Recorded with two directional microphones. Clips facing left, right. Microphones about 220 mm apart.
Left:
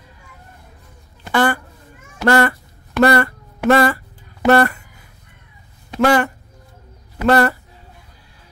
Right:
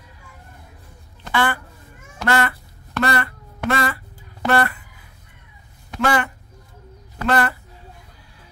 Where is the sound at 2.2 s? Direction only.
40° left (ahead or behind).